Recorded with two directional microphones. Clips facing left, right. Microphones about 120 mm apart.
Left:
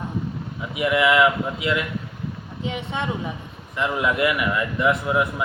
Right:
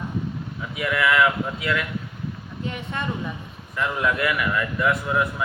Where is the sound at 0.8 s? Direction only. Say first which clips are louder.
Left 3 dB; 20° left (ahead or behind).